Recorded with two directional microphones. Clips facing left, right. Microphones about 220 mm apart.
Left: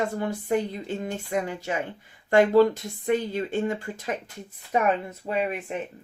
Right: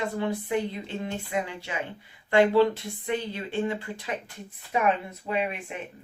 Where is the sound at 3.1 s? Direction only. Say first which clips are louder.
Left 6 dB; 45° left (ahead or behind).